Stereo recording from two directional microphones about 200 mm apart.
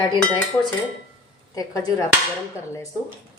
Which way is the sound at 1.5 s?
20° left (ahead or behind).